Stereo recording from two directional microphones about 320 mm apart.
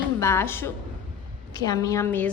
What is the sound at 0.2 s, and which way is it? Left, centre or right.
A woman's voice, centre.